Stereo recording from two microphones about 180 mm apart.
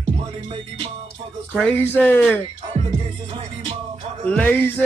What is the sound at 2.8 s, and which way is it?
Music, 35° right (ahead or behind).